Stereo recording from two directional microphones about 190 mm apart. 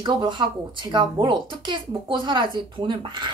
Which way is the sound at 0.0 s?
25° right (ahead or behind).